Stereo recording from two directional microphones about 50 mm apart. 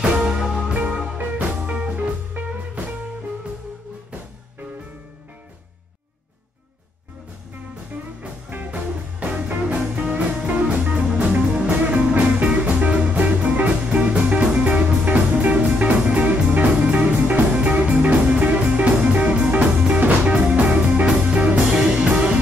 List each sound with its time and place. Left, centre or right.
0.0 s music: centre
2.4 s music: right
8.2 s music: right
11.2 s music: right
14.6 s music: right